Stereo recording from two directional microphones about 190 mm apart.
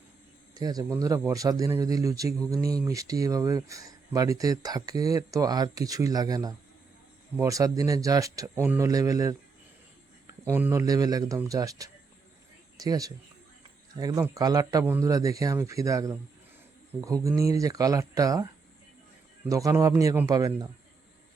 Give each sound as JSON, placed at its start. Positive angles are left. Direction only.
{"t": 0.5, "sound": "a man's voice", "side_deg": -20}
{"t": 10.4, "sound": "a man's voice", "side_deg": -15}
{"t": 19.5, "sound": "a man's voice", "side_deg": -15}